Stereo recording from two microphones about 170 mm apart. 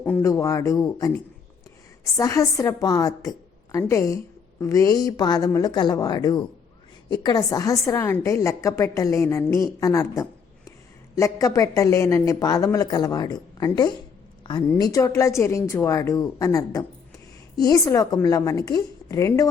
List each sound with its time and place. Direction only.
0.0 s speech: 10° left (ahead or behind)
0.3 s speech: 20° left (ahead or behind)